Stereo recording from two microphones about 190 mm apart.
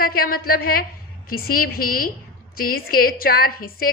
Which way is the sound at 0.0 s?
50° left (ahead or behind).